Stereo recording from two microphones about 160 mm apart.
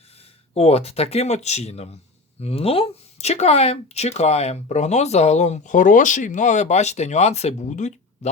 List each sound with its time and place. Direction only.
0.5 s speech: 40° left (ahead or behind)